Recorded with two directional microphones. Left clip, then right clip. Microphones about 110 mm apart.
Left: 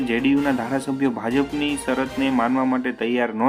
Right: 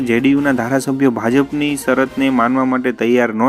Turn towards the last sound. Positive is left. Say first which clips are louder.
# right 8 dB
turn(degrees=-60)  # may be behind; listen again after turning